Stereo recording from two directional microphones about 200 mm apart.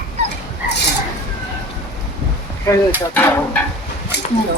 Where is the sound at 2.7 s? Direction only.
15° left (ahead or behind).